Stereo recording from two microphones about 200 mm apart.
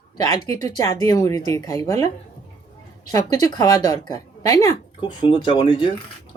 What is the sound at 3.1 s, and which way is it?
Speech, 15° left (ahead or behind).